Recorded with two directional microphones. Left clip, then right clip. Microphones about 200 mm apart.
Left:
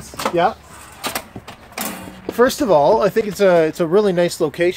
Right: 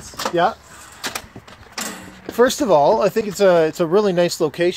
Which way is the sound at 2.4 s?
30° right (ahead or behind).